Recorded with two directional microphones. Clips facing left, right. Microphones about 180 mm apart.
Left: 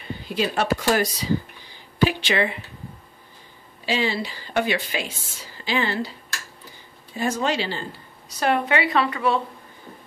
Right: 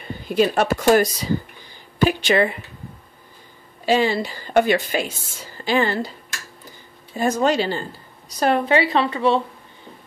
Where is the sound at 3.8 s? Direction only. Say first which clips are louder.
Right 6 dB; 45° right (ahead or behind).